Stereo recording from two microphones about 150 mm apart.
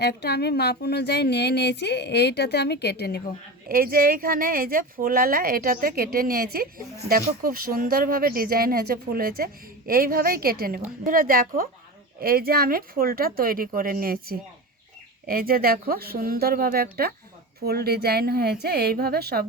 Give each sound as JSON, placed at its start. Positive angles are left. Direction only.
{"t": 0.0, "sound": "speech", "side_deg": 90}
{"t": 3.7, "sound": "speech", "side_deg": -75}
{"t": 12.2, "sound": "speech", "side_deg": -85}